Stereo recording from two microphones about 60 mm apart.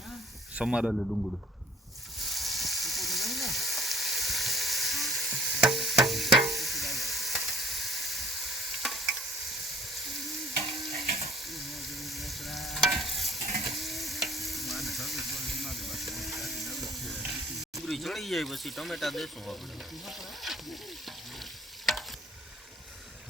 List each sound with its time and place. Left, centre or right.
0.5 s speech: centre
0.9 s a man's voice: centre
2.2 s frying: centre
10.7 s frying: centre
13.7 s stir: centre
16.9 s steam: centre
17.8 s speech: centre
20.1 s stir: centre
21.9 s stir: centre